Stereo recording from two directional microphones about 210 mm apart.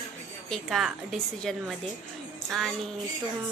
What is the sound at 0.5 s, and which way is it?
A woman's voice, centre (ahead or behind).